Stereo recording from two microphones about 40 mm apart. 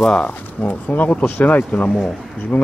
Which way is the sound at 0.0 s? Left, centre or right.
Left.